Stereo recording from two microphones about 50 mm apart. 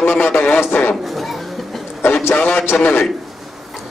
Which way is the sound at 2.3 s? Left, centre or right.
Left.